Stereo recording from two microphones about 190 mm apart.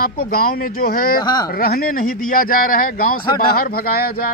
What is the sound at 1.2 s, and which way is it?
Speech, 20° left (ahead or behind).